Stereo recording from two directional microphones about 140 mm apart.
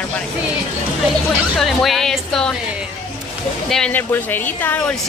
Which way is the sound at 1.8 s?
Centre (ahead or behind).